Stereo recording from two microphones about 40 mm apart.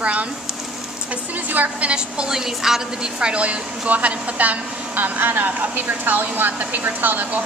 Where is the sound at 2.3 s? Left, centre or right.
Centre.